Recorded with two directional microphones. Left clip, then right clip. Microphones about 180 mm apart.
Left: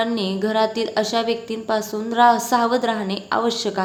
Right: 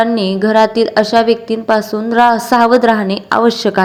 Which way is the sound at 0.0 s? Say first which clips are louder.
Right 9 dB; 35° right (ahead or behind).